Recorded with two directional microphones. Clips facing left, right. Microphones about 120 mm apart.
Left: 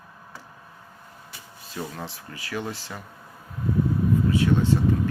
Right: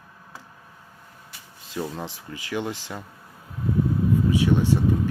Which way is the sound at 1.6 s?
20° right (ahead or behind).